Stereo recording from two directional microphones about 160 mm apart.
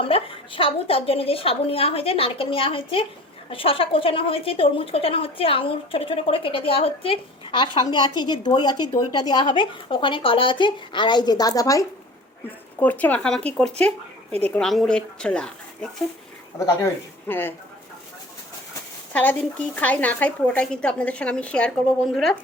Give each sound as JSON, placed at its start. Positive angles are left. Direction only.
{"t": 0.0, "sound": "speech", "side_deg": 35}
{"t": 12.8, "sound": "speech", "side_deg": 10}
{"t": 19.1, "sound": "speech", "side_deg": 10}